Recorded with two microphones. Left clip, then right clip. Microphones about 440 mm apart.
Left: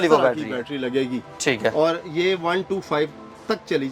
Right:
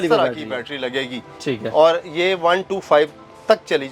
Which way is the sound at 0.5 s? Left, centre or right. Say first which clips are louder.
Right 1 dB; right.